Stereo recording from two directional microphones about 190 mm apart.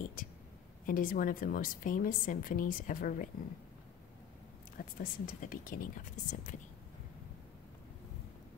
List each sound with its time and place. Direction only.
0.2 s a woman's voice: 45° left (ahead or behind)
4.7 s a woman's voice: 50° left (ahead or behind)